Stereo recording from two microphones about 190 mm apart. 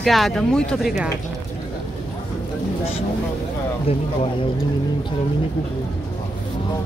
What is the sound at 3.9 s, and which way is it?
Speech, 30° left (ahead or behind).